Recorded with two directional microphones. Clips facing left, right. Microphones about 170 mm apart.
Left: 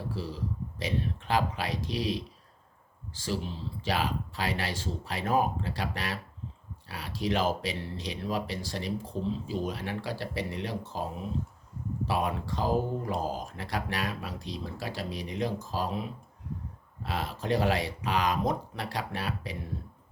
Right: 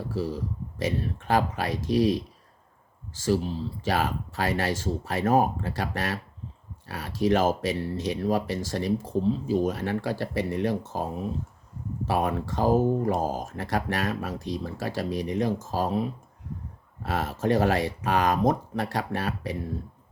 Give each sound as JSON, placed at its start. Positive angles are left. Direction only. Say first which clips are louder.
{"t": 0.1, "sound": "speech", "louder": "right 6 dB", "side_deg": -45}
{"t": 12.0, "sound": "speech", "louder": "right 4 dB", "side_deg": -45}
{"t": 17.1, "sound": "speech", "louder": "right 5 dB", "side_deg": -45}